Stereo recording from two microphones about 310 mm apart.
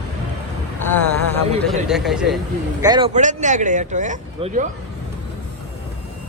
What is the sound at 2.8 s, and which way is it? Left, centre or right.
Speech, centre.